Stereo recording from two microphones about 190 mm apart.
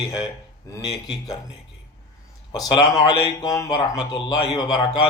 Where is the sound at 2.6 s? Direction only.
25° left (ahead or behind).